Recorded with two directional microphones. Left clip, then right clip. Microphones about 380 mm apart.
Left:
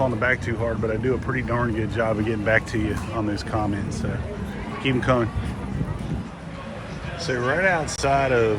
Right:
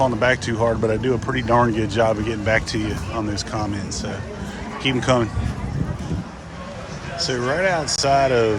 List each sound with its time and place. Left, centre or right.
0.0 s speech: centre
4.8 s speech: centre
7.3 s speech: centre